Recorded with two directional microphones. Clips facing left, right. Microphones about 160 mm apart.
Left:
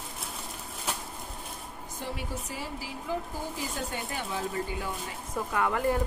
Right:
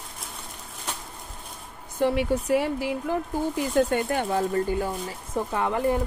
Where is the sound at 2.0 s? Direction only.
65° right (ahead or behind); by 4.9 s 45° right (ahead or behind).